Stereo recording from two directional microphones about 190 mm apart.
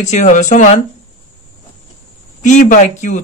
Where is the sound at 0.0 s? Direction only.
40° left (ahead or behind).